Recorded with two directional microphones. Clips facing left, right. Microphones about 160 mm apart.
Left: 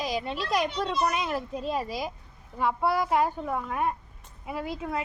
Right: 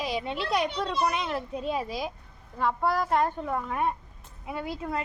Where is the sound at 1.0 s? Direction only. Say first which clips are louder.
Even; 5° left (ahead or behind).